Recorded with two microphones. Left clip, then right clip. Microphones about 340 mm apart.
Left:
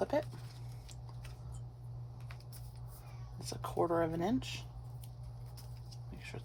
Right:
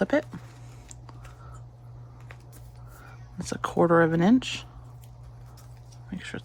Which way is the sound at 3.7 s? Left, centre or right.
Right.